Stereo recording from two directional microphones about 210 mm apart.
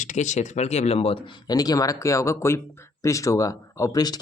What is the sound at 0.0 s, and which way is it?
Speech, 35° left (ahead or behind).